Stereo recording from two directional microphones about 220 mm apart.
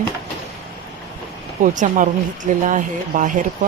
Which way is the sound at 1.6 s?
35° right (ahead or behind).